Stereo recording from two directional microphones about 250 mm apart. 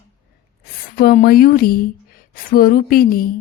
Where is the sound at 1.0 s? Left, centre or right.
Left.